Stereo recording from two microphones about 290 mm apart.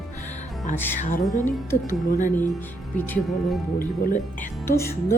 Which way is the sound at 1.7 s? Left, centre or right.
Left.